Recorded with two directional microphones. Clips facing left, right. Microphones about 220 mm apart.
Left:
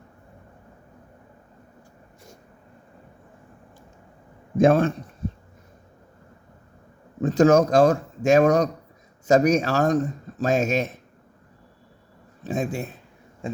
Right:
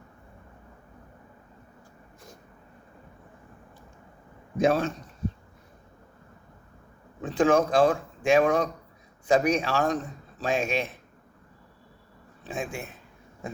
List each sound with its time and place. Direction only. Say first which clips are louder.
4.5 s speech: left 6 dB; 50° left (ahead or behind)
7.2 s speech: left 5 dB; 45° left (ahead or behind)
12.4 s speech: left 7 dB; 40° left (ahead or behind)